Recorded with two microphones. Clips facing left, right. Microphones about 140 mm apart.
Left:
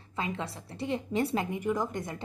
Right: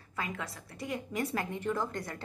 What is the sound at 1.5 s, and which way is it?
Speech, 15° left (ahead or behind).